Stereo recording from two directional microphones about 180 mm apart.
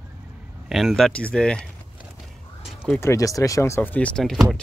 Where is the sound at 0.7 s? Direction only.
Centre (ahead or behind).